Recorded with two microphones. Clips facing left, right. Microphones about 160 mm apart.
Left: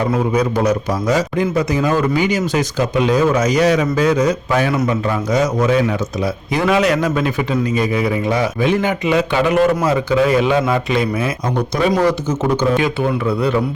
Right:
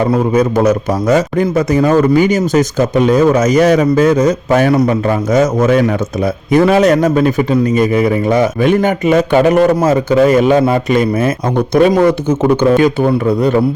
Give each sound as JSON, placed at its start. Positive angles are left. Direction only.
{"t": 0.3, "sound": "speech", "side_deg": -45}